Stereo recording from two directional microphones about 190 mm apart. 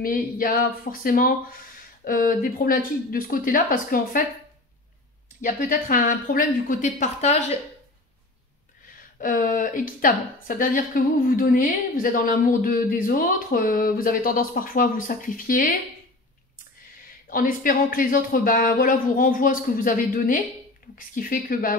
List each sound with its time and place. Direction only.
0.0 s a woman's voice: 50° left (ahead or behind)
5.4 s a woman's voice: 45° left (ahead or behind)
9.2 s a woman's voice: 45° left (ahead or behind)
17.3 s a woman's voice: 50° left (ahead or behind)